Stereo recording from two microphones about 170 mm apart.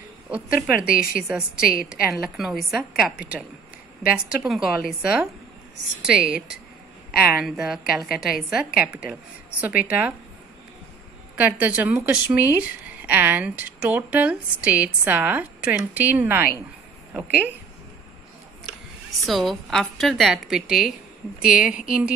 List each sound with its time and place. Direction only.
0.3 s a woman's voice: 5° right (ahead or behind)
0.8 s a woman's voice: 55° left (ahead or behind)
1.1 s a woman's voice: 5° right (ahead or behind)
11.3 s a woman's voice: 10° right (ahead or behind)
19.2 s a woman's voice: centre (ahead or behind)